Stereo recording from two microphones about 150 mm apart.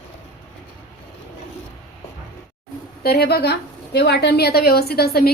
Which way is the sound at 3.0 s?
90° left.